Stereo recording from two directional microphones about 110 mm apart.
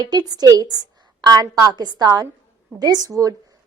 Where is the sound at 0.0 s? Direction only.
40° right (ahead or behind).